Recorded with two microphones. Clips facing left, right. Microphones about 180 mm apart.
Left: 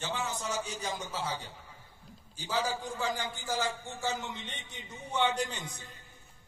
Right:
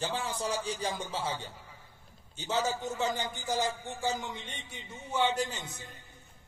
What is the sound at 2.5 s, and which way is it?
A man's voice, 25° right (ahead or behind).